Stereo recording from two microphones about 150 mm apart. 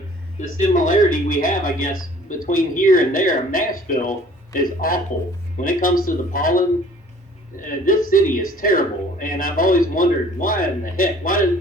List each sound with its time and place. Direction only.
0.3 s a man's voice: 60° left (ahead or behind)